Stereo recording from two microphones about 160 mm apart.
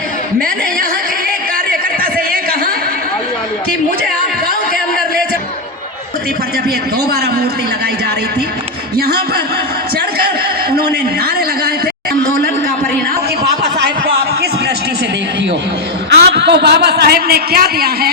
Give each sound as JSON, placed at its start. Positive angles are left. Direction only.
{"t": 1.7, "sound": "a sound", "side_deg": -65}
{"t": 9.0, "sound": "speech", "side_deg": -75}
{"t": 16.0, "sound": "a man's voice", "side_deg": -90}